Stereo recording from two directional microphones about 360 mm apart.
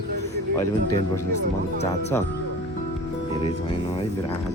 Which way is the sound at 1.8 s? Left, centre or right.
Centre.